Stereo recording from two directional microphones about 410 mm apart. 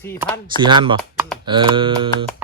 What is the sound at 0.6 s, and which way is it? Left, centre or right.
Speech, centre.